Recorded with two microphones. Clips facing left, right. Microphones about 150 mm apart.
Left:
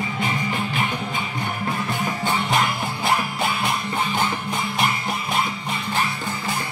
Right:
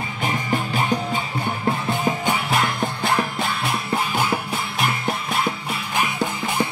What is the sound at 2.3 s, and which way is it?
Music, centre (ahead or behind).